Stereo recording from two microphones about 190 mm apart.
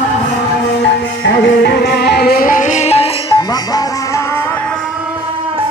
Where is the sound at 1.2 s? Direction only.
70° left (ahead or behind); by 3.1 s 35° left (ahead or behind).